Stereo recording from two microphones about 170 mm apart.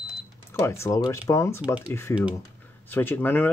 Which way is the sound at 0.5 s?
15° left (ahead or behind).